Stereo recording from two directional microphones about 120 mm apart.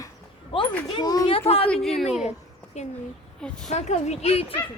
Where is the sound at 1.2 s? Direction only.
50° left (ahead or behind).